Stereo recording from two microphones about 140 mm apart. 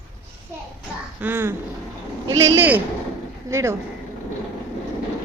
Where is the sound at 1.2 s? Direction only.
15° right (ahead or behind).